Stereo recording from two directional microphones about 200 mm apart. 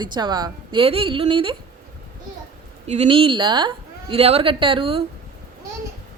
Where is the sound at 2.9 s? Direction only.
30° right (ahead or behind).